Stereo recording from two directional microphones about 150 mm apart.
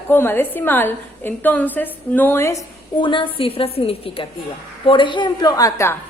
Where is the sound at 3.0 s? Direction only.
30° left (ahead or behind).